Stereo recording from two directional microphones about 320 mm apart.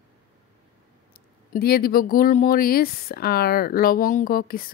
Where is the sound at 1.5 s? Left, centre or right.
Left.